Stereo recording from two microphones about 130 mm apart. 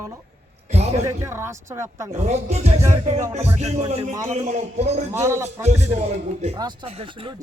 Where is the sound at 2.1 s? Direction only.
60° right (ahead or behind).